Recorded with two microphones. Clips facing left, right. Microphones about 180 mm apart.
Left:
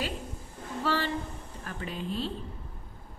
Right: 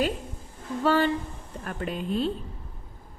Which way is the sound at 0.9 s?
50° right (ahead or behind).